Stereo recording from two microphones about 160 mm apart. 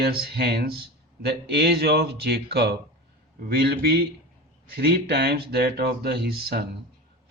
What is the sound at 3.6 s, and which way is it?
Speech, 75° right (ahead or behind).